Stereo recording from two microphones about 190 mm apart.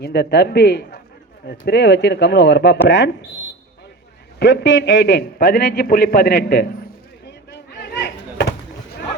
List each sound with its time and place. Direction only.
0.0 s a man's voice: 60° left (ahead or behind)
4.4 s a man's voice: 70° left (ahead or behind)
7.5 s a sound: 60° left (ahead or behind)